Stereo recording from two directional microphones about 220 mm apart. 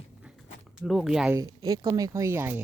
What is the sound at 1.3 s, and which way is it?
Speech, 15° right (ahead or behind).